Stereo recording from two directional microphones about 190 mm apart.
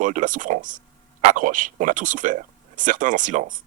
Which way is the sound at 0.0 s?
45° right (ahead or behind).